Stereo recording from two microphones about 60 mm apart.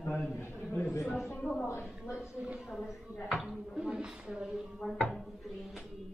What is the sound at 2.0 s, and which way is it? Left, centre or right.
Speech, centre.